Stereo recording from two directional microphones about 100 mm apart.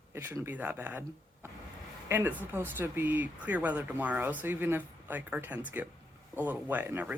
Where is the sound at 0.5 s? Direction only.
20° right (ahead or behind).